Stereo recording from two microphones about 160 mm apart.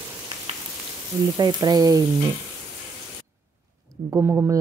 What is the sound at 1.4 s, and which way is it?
Frying, 25° right (ahead or behind).